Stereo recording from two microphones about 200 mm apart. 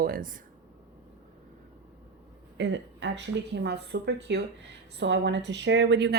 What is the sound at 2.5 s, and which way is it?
A woman's voice, 60° right (ahead or behind).